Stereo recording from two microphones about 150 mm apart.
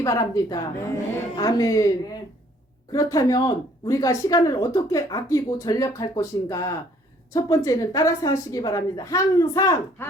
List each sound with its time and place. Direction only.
0.0 s speech: 20° left (ahead or behind)
2.9 s speech: 25° left (ahead or behind)